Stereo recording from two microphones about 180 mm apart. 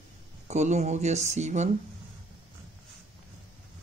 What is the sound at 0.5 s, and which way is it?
Speech, 40° right (ahead or behind).